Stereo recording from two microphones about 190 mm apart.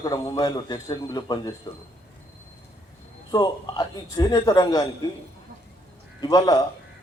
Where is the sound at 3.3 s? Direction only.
20° left (ahead or behind).